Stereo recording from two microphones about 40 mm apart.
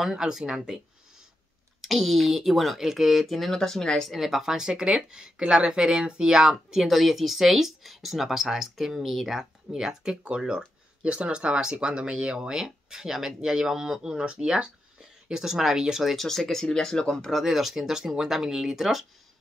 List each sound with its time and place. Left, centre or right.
0.0 s speech: centre
1.8 s speech: centre
4.1 s speech: centre
6.9 s speech: centre
10.2 s speech: right
16.2 s speech: centre
17.3 s speech: centre